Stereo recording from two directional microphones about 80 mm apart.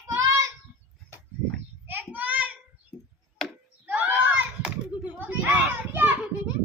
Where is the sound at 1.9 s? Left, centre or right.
Right.